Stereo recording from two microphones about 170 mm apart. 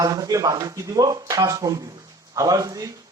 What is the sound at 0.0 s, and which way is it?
Speech, 20° right (ahead or behind).